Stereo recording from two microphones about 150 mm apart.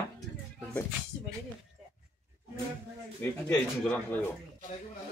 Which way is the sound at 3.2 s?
10° left (ahead or behind).